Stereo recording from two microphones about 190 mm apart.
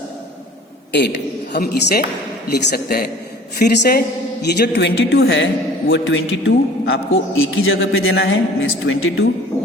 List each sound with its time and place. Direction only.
1.5 s a woman's voice: 55° left (ahead or behind)
5.9 s a man's voice: 80° left